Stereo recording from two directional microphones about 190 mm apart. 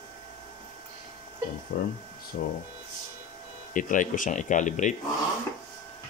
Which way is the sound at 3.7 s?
45° left (ahead or behind).